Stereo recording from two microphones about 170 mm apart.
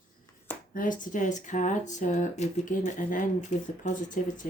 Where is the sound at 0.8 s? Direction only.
50° left (ahead or behind).